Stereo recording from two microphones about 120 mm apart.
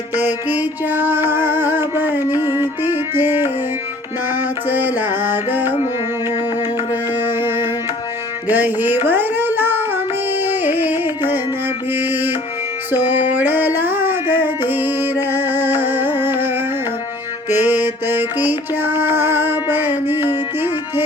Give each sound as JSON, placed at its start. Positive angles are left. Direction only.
{"t": 0.2, "sound": "music", "side_deg": -15}
{"t": 7.2, "sound": "music", "side_deg": -15}
{"t": 13.3, "sound": "music", "side_deg": -15}
{"t": 17.5, "sound": "music", "side_deg": -15}